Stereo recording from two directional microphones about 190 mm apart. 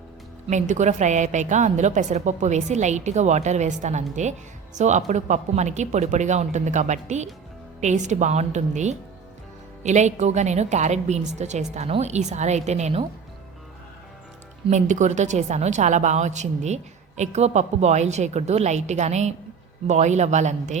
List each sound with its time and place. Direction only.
0.4 s a woman's voice: 40° right (ahead or behind)
14.7 s a woman's voice: 40° right (ahead or behind)